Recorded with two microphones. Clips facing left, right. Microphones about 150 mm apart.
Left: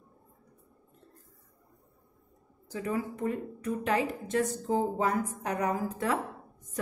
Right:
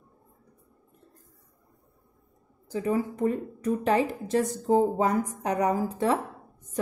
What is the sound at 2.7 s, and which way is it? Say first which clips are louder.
A woman's voice: right 5 dB; 30° right (ahead or behind).